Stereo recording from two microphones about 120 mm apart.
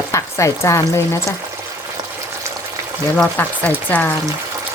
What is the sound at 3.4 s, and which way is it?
Speech, 15° left (ahead or behind).